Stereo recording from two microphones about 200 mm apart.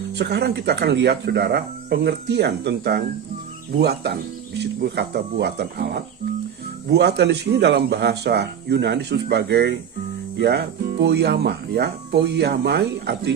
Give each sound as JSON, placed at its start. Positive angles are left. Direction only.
{"t": 0.2, "sound": "speech", "side_deg": -55}